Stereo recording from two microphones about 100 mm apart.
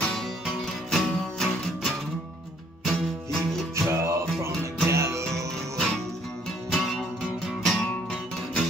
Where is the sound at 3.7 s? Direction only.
30° right (ahead or behind).